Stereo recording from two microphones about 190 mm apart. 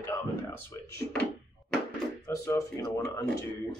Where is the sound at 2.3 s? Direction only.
15° left (ahead or behind).